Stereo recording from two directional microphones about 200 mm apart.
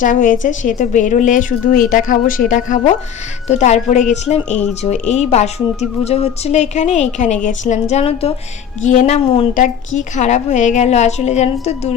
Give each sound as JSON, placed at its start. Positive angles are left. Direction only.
{"t": 0.0, "sound": "a woman's voice", "side_deg": 40}